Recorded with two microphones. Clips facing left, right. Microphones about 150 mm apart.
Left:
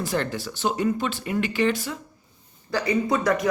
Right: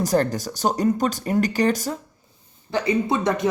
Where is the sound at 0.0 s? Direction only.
40° right (ahead or behind).